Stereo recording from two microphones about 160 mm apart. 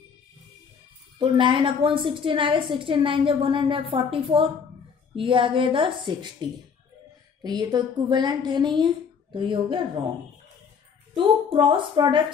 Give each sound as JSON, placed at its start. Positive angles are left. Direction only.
{"t": 1.1, "sound": "a woman's voice", "side_deg": -30}
{"t": 11.1, "sound": "a woman's voice", "side_deg": -30}